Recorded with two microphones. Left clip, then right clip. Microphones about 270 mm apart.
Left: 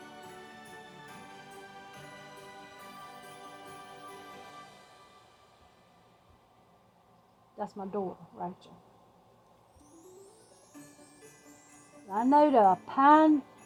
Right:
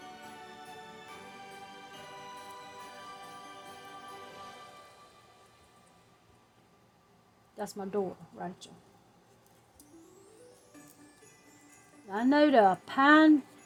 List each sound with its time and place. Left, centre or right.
7.6 s a woman's voice: right
10.7 s music: centre
12.0 s speech: right